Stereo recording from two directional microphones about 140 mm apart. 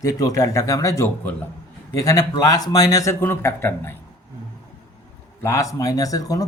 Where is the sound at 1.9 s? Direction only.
25° left (ahead or behind).